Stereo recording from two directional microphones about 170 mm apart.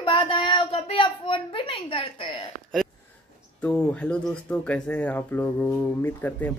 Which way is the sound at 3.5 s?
10° left (ahead or behind).